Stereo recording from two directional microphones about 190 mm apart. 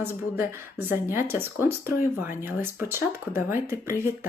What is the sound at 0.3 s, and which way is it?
Speech, 10° right (ahead or behind).